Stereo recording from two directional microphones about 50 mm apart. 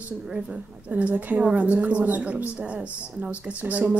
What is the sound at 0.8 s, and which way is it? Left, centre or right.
A woman's voice, right.